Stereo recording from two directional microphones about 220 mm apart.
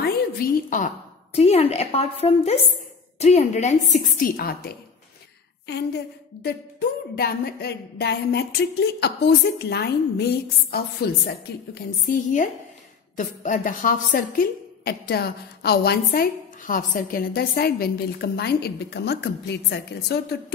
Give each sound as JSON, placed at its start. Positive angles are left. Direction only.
{"t": 0.0, "sound": "a woman's voice", "side_deg": 40}